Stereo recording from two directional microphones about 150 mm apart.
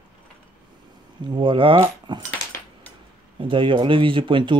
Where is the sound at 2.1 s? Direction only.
30° right (ahead or behind).